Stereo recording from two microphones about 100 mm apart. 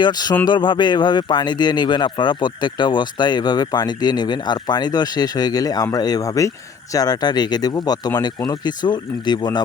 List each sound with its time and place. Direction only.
0.0 s speech: 45° left (ahead or behind)